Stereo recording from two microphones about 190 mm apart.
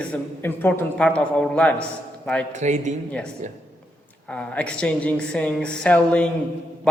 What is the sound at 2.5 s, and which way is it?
Speech, 40° right (ahead or behind).